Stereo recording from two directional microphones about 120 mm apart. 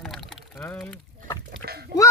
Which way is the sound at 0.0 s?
Centre (ahead or behind).